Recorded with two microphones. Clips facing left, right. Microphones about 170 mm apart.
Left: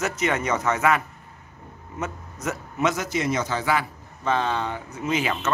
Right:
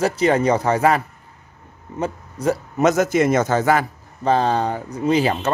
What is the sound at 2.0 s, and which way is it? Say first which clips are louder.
Speech: right 9 dB; 30° right (ahead or behind).